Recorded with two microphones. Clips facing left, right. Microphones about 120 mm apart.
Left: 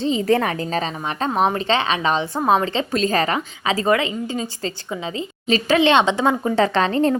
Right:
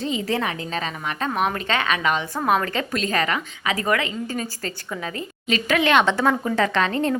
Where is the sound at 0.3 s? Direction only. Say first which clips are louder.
Left 6 dB; 45° left (ahead or behind); by 5.2 s 20° left (ahead or behind).